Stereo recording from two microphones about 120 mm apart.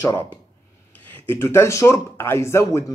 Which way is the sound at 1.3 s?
20° left (ahead or behind).